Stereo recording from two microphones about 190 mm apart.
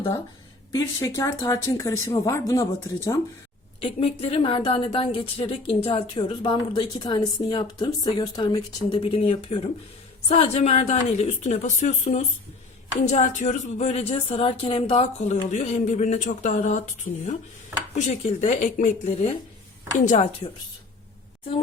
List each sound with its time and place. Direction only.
0.7 s speech: 20° left (ahead or behind)
3.8 s a woman's voice: 30° left (ahead or behind)